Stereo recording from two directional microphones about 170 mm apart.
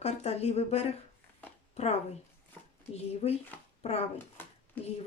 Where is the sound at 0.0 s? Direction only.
40° left (ahead or behind).